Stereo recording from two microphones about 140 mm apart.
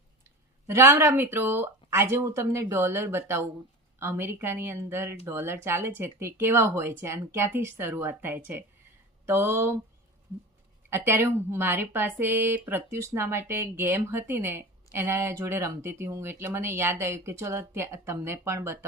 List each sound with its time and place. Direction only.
0.7 s speech: 20° right (ahead or behind)
10.8 s speech: 15° right (ahead or behind)